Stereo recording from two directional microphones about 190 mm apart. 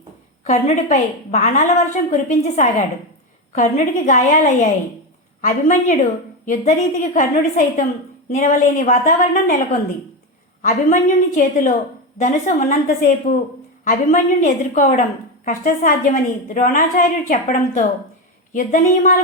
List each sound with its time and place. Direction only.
0.4 s a woman's voice: 40° left (ahead or behind)
10.6 s a woman's voice: 40° left (ahead or behind)